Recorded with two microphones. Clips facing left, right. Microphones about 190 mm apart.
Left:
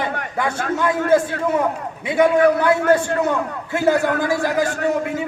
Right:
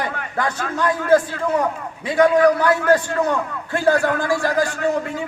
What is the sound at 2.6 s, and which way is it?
A man's voice, 25° left (ahead or behind).